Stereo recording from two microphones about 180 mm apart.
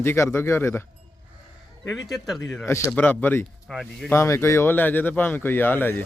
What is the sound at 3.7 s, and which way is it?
Speech, centre (ahead or behind).